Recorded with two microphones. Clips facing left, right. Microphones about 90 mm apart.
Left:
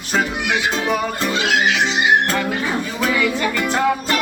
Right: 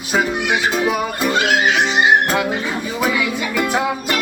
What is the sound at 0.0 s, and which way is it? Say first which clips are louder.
Music: right 2 dB; 5° right (ahead or behind).